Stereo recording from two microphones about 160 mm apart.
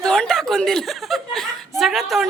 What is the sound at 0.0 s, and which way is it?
Chuckle, 5° left (ahead or behind).